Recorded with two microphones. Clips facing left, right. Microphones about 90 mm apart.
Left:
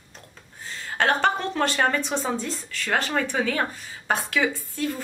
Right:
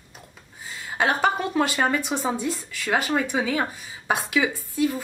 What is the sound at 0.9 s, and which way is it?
A woman's voice, 10° right (ahead or behind).